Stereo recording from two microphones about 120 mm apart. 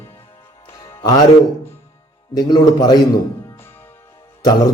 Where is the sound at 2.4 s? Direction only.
35° left (ahead or behind).